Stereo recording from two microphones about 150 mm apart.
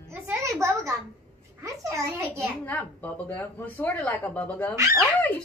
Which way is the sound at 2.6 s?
10° left (ahead or behind).